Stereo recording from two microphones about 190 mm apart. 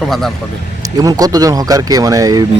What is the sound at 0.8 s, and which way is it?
Speech, 20° right (ahead or behind).